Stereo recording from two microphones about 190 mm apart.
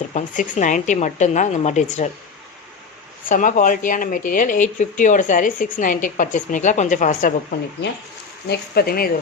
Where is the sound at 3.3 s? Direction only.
45° left (ahead or behind).